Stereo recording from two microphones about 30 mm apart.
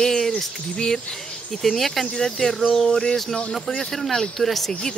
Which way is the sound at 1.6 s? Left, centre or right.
Centre.